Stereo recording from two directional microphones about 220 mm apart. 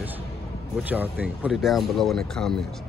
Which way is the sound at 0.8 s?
5° right (ahead or behind).